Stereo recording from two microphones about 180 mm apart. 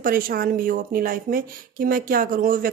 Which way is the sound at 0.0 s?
55° right (ahead or behind).